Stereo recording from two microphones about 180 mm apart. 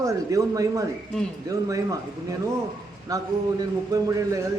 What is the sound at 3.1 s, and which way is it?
A man's voice, 20° right (ahead or behind).